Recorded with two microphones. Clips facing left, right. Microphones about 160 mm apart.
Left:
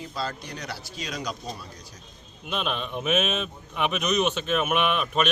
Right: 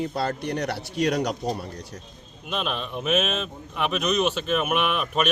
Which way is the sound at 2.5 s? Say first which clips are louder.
Even; centre (ahead or behind).